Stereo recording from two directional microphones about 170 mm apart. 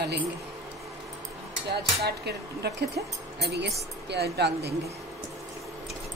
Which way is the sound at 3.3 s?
90° right.